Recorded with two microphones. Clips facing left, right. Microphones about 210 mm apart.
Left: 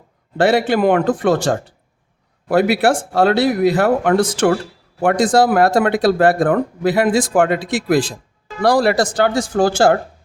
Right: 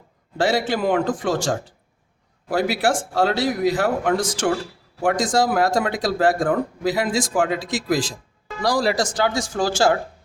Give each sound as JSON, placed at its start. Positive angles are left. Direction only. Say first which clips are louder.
{"t": 0.3, "sound": "speech", "louder": "left 6 dB", "side_deg": 60}